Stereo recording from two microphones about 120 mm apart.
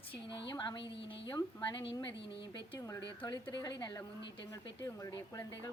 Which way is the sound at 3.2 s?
40° left (ahead or behind).